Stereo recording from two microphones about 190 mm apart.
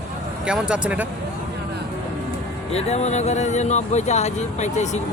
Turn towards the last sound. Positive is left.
turn(degrees=40)  # may be behind; listen again after turning